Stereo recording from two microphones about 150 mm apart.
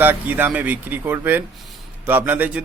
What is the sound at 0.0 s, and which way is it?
A man's voice, 10° right (ahead or behind).